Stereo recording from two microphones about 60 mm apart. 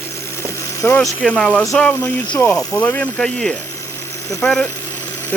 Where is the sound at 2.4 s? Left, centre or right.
Centre.